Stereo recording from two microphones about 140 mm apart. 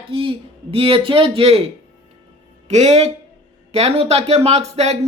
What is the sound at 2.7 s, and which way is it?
Speech, 50° right (ahead or behind).